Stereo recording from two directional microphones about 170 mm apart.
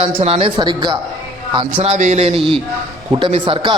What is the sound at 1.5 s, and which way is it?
Speech, 35° right (ahead or behind).